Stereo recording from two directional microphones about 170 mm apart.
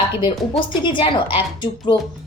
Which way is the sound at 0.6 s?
30° left (ahead or behind).